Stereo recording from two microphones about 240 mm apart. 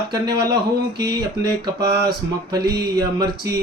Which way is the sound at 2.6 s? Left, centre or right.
Centre.